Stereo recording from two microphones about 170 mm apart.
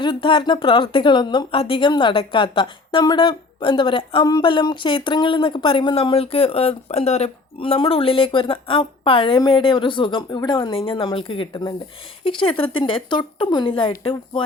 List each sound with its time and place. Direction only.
0.0 s speech: 30° left (ahead or behind)